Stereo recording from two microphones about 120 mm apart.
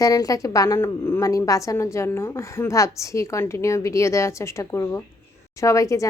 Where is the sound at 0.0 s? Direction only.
30° left (ahead or behind).